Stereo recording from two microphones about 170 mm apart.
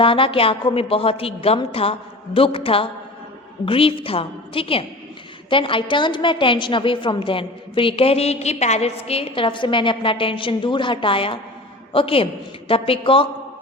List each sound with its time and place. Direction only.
0.0 s a woman's voice: 30° left (ahead or behind)